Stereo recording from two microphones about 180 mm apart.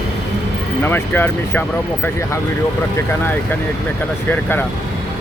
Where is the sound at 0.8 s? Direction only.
10° left (ahead or behind).